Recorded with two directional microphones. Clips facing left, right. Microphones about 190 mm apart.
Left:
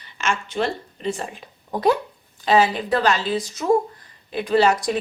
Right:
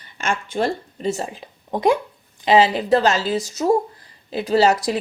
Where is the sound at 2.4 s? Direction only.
20° right (ahead or behind).